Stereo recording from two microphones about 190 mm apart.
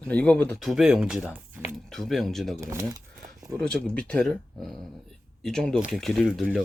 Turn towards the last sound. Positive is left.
turn(degrees=0)  # may be behind; listen again after turning